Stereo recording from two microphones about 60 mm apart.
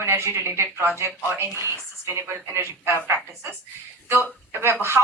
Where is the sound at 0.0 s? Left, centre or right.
Right.